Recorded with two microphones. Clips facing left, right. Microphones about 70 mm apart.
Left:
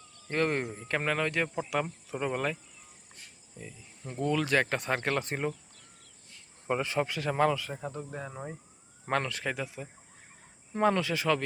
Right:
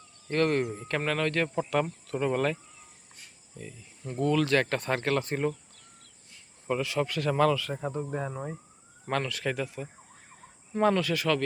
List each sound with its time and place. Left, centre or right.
0.3 s speech: centre
3.6 s speech: centre
6.7 s speech: left
7.1 s speech: centre
7.9 s speech: centre
8.3 s speech: centre
9.0 s speech: left
9.4 s speech: centre
10.9 s speech: left